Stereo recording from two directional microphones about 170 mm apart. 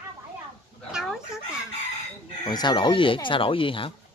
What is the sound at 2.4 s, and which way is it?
Speech, 25° left (ahead or behind).